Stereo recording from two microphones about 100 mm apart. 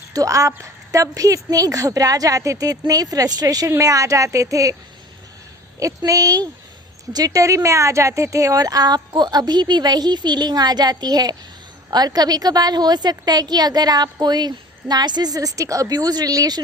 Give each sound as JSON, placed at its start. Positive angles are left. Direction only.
{"t": 0.1, "sound": "a woman's voice", "side_deg": -35}
{"t": 5.8, "sound": "a woman's voice", "side_deg": -35}